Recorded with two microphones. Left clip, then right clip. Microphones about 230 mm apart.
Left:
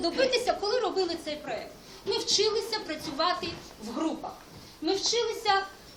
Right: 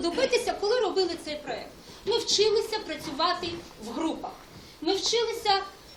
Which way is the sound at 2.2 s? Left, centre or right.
Centre.